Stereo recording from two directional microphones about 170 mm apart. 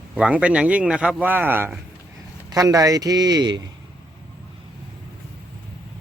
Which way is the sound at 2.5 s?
20° right (ahead or behind).